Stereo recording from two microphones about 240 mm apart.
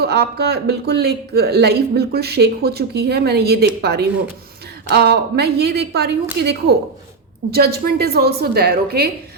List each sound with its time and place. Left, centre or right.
0.0 s a woman's voice: right